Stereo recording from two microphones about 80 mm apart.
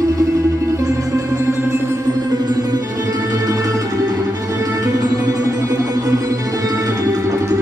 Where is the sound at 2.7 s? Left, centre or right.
Right.